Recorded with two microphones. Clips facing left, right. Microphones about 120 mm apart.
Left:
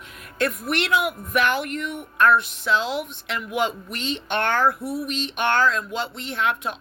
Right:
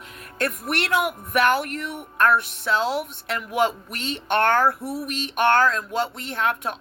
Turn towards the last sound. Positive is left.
turn(degrees=-45)  # may be behind; listen again after turning